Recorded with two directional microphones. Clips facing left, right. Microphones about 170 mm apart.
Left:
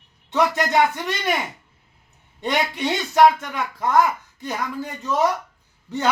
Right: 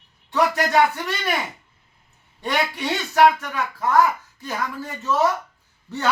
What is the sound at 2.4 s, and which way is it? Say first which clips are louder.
Speech: left 1 dB; 20° left (ahead or behind).